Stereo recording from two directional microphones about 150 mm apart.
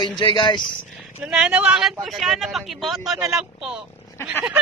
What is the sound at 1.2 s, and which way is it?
Speech, 5° right (ahead or behind).